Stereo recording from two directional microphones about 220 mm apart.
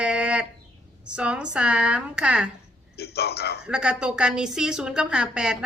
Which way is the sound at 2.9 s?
45° left (ahead or behind).